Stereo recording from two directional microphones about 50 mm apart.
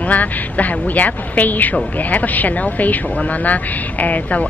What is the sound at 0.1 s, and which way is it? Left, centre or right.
Speech, left.